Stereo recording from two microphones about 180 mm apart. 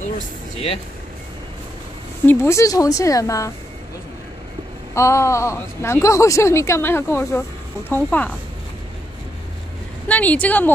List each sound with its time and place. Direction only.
2.2 s a woman's voice: 15° left (ahead or behind)
4.9 s a woman's voice: 15° left (ahead or behind)
10.0 s a woman's voice: 10° left (ahead or behind)